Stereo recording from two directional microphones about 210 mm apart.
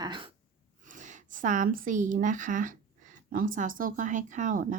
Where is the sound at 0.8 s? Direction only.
35° right (ahead or behind).